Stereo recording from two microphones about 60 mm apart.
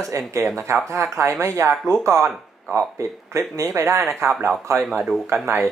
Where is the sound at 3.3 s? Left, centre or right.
Right.